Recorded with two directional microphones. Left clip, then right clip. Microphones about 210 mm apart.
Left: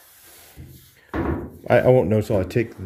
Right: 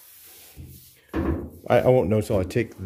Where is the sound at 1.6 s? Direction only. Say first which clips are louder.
Left 3 dB; 5° right (ahead or behind).